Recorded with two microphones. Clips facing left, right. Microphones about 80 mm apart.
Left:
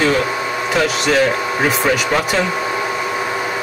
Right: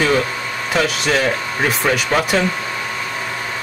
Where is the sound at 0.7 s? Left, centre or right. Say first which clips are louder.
Left 2 dB; centre.